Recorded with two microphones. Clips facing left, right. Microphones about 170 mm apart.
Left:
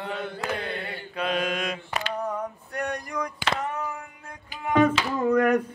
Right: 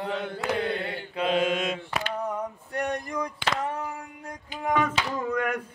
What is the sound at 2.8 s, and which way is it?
Mantra, 25° right (ahead or behind).